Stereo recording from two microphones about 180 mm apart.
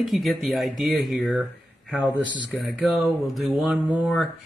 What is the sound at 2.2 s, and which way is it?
Speech, 25° right (ahead or behind).